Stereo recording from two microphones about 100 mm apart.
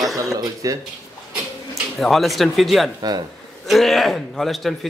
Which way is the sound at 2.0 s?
Centre (ahead or behind).